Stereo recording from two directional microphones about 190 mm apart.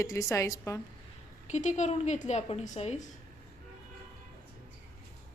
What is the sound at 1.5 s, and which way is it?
A woman's voice, 40° left (ahead or behind).